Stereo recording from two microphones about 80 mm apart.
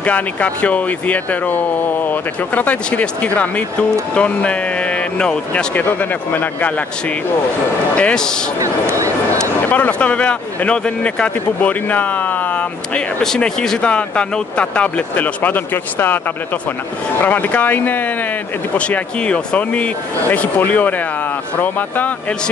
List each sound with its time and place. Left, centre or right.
0.0 s speech: centre
5.8 s speech: left
8.0 s speech: centre
8.8 s speech: right
9.7 s speech: centre
17.2 s speech: left